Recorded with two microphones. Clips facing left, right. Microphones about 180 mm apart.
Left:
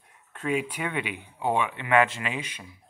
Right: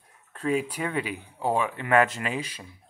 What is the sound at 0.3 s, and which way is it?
Speech, 35° right (ahead or behind).